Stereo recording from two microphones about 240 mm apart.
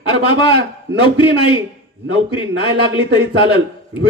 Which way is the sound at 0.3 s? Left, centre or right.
Left.